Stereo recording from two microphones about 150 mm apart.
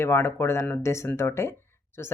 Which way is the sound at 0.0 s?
15° left (ahead or behind).